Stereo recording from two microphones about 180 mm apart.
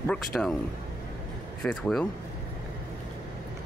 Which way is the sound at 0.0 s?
5° left (ahead or behind).